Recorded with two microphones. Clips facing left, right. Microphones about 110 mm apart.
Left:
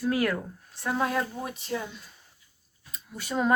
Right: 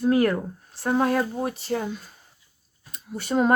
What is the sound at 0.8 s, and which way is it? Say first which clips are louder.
Speech: right 5 dB; 45° right (ahead or behind).